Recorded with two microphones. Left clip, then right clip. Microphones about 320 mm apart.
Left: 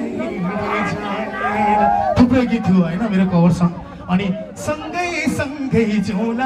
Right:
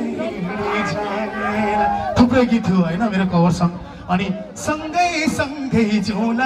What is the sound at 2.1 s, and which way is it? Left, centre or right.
Speech, right.